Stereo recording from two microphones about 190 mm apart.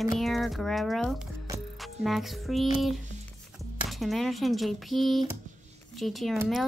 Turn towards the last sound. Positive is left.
turn(degrees=0)  # may be behind; listen again after turning